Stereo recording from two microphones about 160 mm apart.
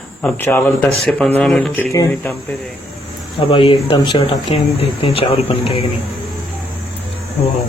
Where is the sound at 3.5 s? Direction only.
35° left (ahead or behind).